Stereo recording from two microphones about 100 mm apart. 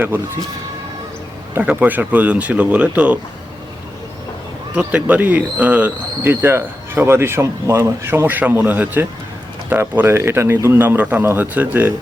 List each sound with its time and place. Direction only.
1.5 s speech: 15° right (ahead or behind)
4.7 s speech: 15° right (ahead or behind)